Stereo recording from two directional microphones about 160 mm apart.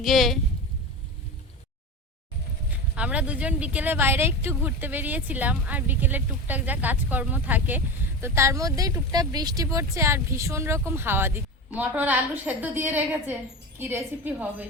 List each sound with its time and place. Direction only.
0.0 s speech: centre (ahead or behind)
2.6 s speech: 10° right (ahead or behind)